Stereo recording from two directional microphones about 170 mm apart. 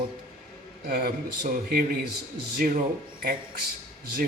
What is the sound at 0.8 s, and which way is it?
Speech, 60° right (ahead or behind).